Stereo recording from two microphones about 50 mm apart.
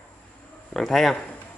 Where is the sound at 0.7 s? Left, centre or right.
Centre.